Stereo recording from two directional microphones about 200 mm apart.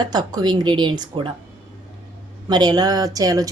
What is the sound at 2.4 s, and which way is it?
A woman's voice, 20° right (ahead or behind).